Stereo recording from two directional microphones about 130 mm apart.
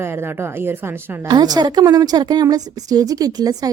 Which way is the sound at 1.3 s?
30° right (ahead or behind).